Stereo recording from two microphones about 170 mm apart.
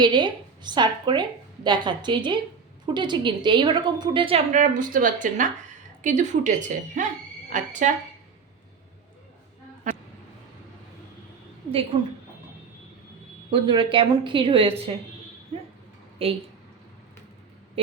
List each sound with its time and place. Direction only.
0.0 s a woman's voice: 25° right (ahead or behind); by 7.9 s 45° right (ahead or behind)
9.9 s speech: 45° right (ahead or behind)
13.5 s a woman's voice: 30° right (ahead or behind)